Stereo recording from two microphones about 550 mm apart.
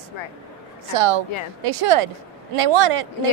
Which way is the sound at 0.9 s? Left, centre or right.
Right.